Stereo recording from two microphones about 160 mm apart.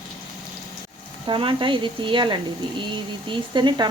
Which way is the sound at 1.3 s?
30° right (ahead or behind).